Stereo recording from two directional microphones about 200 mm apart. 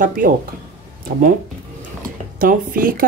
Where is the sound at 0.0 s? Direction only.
45° right (ahead or behind).